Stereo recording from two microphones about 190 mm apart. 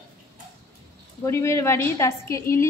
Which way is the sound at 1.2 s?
15° left (ahead or behind).